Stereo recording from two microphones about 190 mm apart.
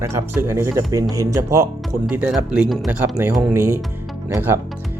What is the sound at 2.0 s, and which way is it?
Speech, 5° right (ahead or behind).